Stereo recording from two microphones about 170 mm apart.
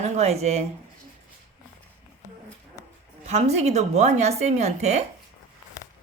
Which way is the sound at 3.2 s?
40° right (ahead or behind).